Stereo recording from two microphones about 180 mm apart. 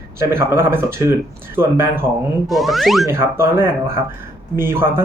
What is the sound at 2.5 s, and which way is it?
Speech, centre (ahead or behind).